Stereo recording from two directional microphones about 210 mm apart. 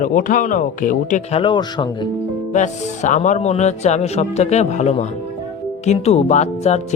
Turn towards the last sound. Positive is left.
turn(degrees=30)  # may be behind; listen again after turning